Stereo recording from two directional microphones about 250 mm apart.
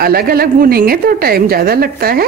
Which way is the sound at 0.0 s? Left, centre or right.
Right.